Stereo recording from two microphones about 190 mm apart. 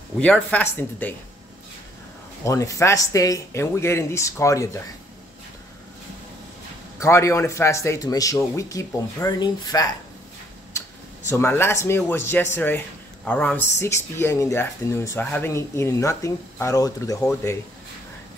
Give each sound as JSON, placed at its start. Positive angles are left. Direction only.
{"t": 0.2, "sound": "speech", "side_deg": 5}
{"t": 2.4, "sound": "speech", "side_deg": 15}
{"t": 7.0, "sound": "speech", "side_deg": 15}
{"t": 11.2, "sound": "speech", "side_deg": 15}